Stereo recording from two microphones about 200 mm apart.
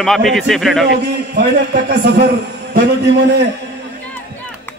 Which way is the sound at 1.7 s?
50° right (ahead or behind).